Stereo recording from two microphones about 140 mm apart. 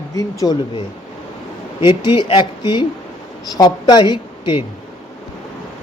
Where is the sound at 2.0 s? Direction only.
30° left (ahead or behind).